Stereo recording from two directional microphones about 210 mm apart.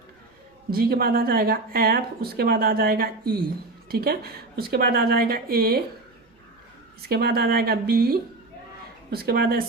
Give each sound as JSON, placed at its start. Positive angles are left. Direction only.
{"t": 0.7, "sound": "speech", "side_deg": -45}
{"t": 7.0, "sound": "speech", "side_deg": -50}